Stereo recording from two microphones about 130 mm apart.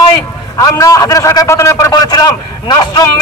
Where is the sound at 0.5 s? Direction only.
25° left (ahead or behind).